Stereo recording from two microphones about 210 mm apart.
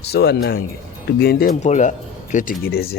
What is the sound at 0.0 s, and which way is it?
Speech, 50° left (ahead or behind).